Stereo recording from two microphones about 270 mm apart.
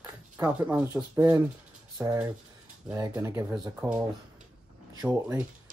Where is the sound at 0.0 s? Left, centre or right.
Centre.